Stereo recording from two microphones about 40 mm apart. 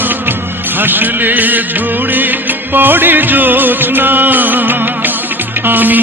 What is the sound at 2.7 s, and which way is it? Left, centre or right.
Music, right.